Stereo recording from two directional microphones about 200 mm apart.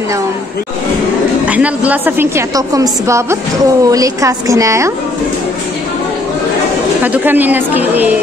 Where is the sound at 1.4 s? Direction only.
5° right (ahead or behind).